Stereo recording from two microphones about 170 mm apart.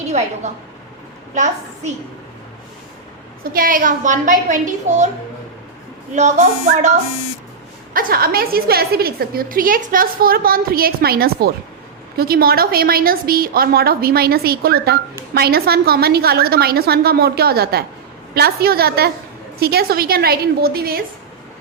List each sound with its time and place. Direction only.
0.1 s a woman's voice: 40° right (ahead or behind)
3.5 s a woman's voice: 55° right (ahead or behind)
6.1 s a woman's voice: 45° right (ahead or behind)
7.9 s a woman's voice: 60° right (ahead or behind)